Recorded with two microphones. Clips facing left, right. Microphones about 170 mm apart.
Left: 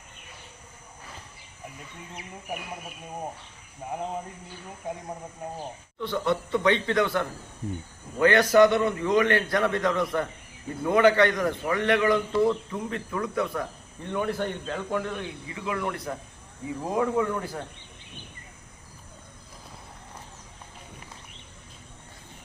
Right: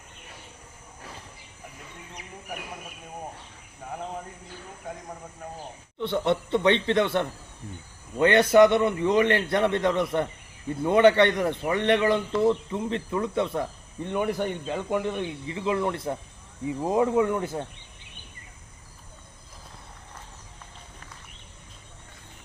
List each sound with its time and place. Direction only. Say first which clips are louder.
6.0 s a man's voice: right 2 dB; 25° right (ahead or behind)